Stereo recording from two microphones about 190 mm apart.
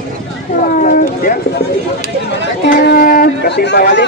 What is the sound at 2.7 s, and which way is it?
Speech, 50° left (ahead or behind).